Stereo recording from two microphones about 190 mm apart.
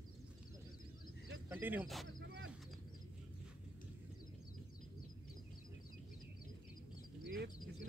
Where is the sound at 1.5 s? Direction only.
10° right (ahead or behind).